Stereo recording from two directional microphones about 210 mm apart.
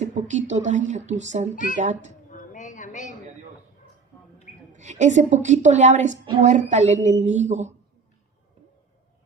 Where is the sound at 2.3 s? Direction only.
40° left (ahead or behind).